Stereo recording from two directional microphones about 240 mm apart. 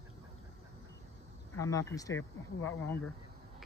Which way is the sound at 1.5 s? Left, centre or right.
Centre.